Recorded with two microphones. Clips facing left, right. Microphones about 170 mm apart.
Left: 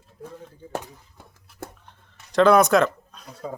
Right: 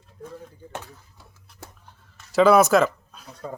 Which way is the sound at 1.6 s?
50° left (ahead or behind).